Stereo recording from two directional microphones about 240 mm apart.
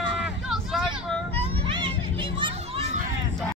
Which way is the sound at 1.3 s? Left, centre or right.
Right.